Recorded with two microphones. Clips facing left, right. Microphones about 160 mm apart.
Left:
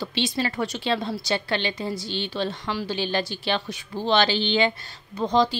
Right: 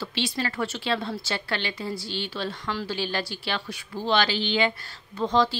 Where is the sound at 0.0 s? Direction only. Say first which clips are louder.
Left 3 dB; 20° left (ahead or behind).